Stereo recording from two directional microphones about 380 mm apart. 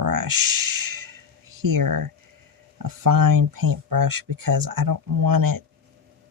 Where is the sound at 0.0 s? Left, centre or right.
Right.